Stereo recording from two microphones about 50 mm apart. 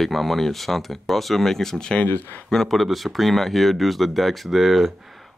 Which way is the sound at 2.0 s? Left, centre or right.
Left.